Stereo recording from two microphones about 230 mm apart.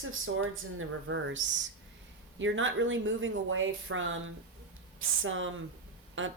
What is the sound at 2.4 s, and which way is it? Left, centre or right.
Speech, right.